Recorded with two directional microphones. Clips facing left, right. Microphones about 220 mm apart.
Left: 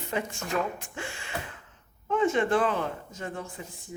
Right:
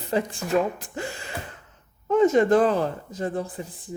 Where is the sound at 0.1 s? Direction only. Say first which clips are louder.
Right 7 dB; 35° right (ahead or behind).